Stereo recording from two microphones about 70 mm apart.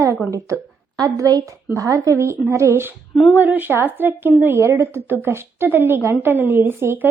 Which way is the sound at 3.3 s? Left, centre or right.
Right.